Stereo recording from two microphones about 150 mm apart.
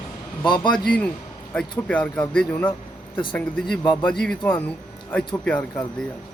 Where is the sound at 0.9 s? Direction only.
10° left (ahead or behind).